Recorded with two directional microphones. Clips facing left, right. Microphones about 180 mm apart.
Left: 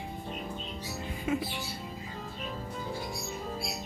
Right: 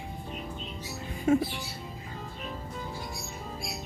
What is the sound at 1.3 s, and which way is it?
Speech, 50° right (ahead or behind).